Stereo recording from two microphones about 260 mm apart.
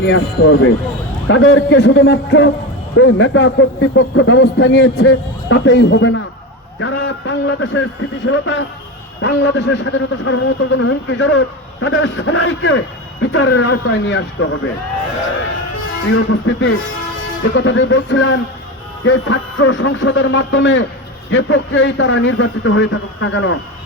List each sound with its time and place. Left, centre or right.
0.0 s a man's voice: left
16.1 s a man's voice: left